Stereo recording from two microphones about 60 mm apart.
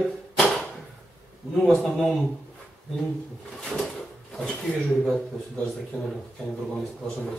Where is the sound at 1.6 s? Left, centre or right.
Centre.